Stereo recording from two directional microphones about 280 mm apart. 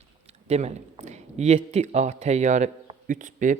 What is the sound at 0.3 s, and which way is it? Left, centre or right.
Speech, right.